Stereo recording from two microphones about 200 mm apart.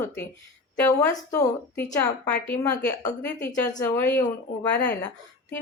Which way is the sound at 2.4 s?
10° left (ahead or behind).